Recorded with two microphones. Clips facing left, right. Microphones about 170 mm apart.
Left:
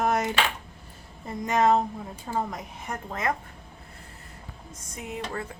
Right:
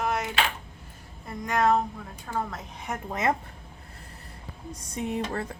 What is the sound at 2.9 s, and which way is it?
Speech, centre (ahead or behind).